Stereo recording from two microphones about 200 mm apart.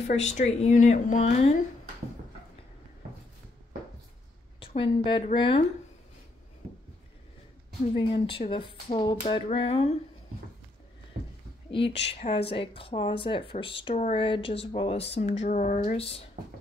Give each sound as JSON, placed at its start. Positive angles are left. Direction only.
{"t": 0.0, "sound": "a woman's voice", "side_deg": 35}
{"t": 4.6, "sound": "speech", "side_deg": 25}
{"t": 7.9, "sound": "speech", "side_deg": 25}
{"t": 11.9, "sound": "speech", "side_deg": 60}
{"t": 12.4, "sound": "a woman's voice", "side_deg": 25}